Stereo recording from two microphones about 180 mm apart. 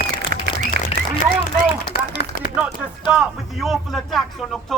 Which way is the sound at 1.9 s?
55° left (ahead or behind).